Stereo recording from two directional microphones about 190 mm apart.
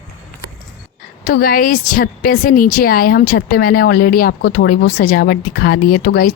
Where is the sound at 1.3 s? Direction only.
50° left (ahead or behind).